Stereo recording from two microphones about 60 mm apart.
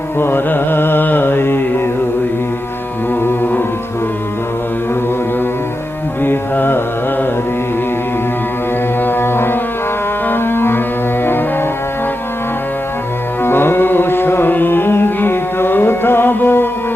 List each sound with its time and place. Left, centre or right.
0.2 s music: left
3.2 s carnatic music: left
6.2 s mantra: left
9.0 s music: left
13.4 s carnatic music: left